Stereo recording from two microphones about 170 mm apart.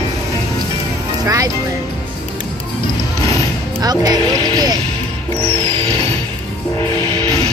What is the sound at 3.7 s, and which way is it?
Speech, 25° right (ahead or behind).